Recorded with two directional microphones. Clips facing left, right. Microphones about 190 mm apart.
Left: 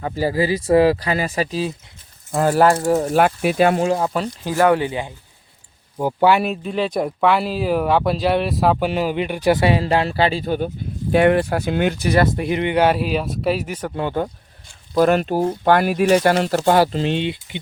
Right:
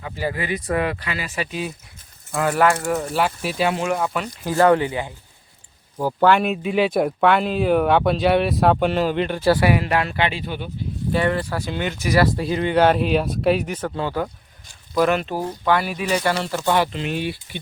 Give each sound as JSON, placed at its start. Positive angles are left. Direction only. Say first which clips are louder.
{"t": 0.0, "sound": "speech", "louder": "left 7 dB", "side_deg": 35}
{"t": 3.1, "sound": "speech", "louder": "left 6 dB", "side_deg": 50}
{"t": 3.8, "sound": "speech", "louder": "left 3 dB", "side_deg": 30}
{"t": 4.4, "sound": "speech", "louder": "right 1 dB", "side_deg": 15}
{"t": 6.5, "sound": "speech", "louder": "right 2 dB", "side_deg": -5}
{"t": 11.1, "sound": "speech", "louder": "left 7 dB", "side_deg": 60}
{"t": 11.9, "sound": "speech", "louder": "left 1 dB", "side_deg": 30}
{"t": 14.9, "sound": "speech", "louder": "left 4 dB", "side_deg": 40}